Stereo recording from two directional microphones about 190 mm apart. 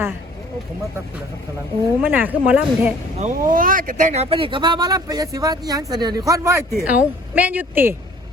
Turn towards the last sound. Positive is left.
turn(degrees=-10)  # may be behind; listen again after turning